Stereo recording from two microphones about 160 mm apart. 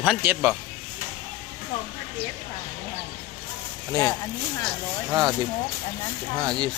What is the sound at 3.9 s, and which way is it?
Speech, 25° right (ahead or behind).